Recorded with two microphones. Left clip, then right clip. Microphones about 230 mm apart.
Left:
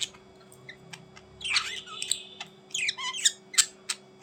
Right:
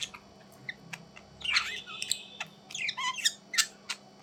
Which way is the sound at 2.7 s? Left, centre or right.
Centre.